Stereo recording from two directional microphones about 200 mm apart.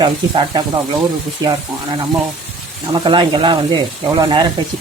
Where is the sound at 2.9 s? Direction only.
20° right (ahead or behind).